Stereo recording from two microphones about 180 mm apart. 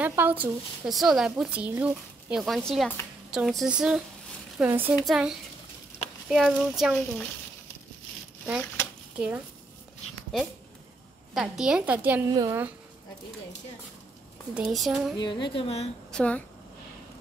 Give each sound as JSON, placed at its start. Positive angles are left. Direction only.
{"t": 0.0, "sound": "a woman's voice", "side_deg": -10}
{"t": 2.4, "sound": "a woman's voice", "side_deg": 0}
{"t": 9.1, "sound": "speech", "side_deg": -5}
{"t": 11.3, "sound": "speech", "side_deg": -5}
{"t": 12.3, "sound": "a woman's voice", "side_deg": -20}
{"t": 14.5, "sound": "speech", "side_deg": -5}
{"t": 15.1, "sound": "speech", "side_deg": 25}
{"t": 16.1, "sound": "speech", "side_deg": 5}